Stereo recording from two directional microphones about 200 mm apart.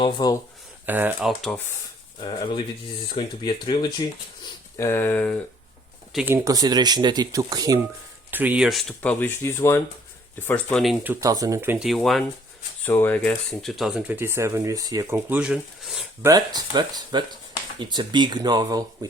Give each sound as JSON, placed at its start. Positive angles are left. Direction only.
{"t": 0.0, "sound": "speech", "side_deg": 25}
{"t": 0.9, "sound": "speech", "side_deg": -10}
{"t": 2.2, "sound": "speech", "side_deg": 25}
{"t": 6.1, "sound": "speech", "side_deg": -10}
{"t": 11.1, "sound": "speech", "side_deg": -15}
{"t": 16.2, "sound": "speech", "side_deg": -20}